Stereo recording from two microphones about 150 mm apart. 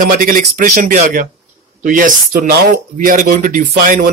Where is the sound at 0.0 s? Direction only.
65° right (ahead or behind).